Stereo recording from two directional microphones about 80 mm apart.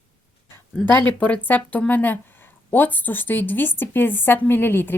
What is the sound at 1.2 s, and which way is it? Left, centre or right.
Speech, centre.